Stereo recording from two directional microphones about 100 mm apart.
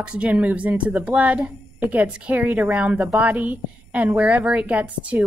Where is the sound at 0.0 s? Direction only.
10° right (ahead or behind).